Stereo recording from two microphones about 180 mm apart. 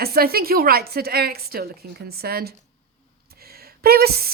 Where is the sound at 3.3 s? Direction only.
60° right (ahead or behind).